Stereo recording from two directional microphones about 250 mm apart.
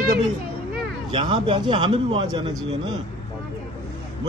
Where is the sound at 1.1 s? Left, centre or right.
Centre.